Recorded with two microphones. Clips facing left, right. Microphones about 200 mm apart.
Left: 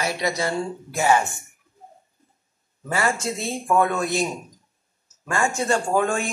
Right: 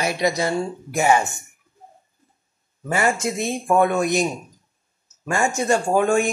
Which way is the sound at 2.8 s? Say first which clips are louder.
Right 3 dB; 20° right (ahead or behind).